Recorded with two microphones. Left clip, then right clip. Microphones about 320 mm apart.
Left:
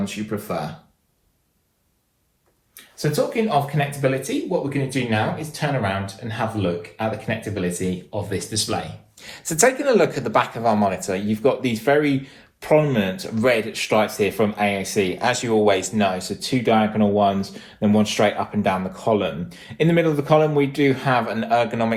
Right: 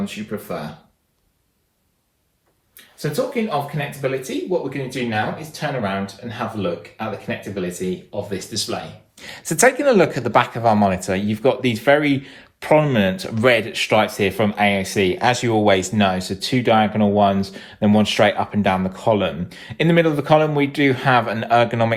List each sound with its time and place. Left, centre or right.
3.5 s speech: centre
9.2 s speech: right